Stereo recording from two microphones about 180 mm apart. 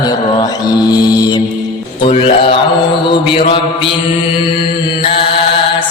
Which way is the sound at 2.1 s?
30° left (ahead or behind).